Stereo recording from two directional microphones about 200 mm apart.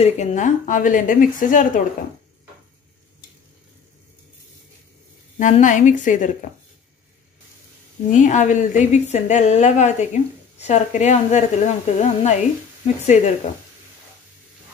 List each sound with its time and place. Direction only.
0.0 s a woman's voice: 35° left (ahead or behind)
5.4 s a woman's voice: 40° left (ahead or behind)
8.1 s a woman's voice: 40° left (ahead or behind)